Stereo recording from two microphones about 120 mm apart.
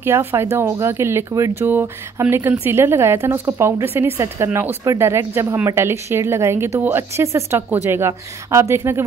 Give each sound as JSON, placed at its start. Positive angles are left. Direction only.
{"t": 0.0, "sound": "a woman's voice", "side_deg": -20}